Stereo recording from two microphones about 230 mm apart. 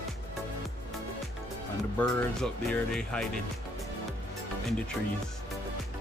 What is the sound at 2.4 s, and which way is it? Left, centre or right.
Speech, centre.